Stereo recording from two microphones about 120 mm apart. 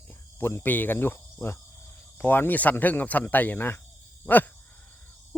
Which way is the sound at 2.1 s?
15° left (ahead or behind).